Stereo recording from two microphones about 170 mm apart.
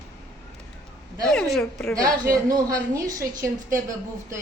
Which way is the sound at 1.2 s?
5° left (ahead or behind).